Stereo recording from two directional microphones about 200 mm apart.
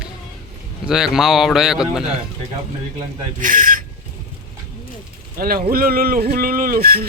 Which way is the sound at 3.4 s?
40° right (ahead or behind).